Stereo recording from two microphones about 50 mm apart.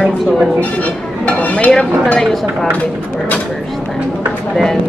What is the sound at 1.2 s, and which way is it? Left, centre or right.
Dishes, left.